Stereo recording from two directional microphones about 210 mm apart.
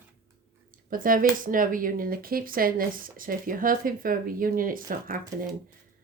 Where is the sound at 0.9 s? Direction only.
40° right (ahead or behind).